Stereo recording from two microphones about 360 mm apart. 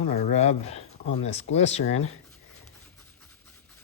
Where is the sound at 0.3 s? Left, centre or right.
Centre.